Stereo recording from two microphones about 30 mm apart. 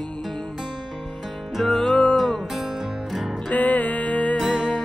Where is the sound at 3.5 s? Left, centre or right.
Left.